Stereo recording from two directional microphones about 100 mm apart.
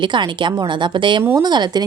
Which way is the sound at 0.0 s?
50° right (ahead or behind).